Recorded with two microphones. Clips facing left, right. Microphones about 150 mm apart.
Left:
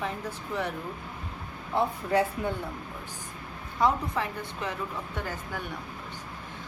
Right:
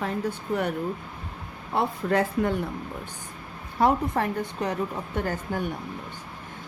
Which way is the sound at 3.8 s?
50° right (ahead or behind).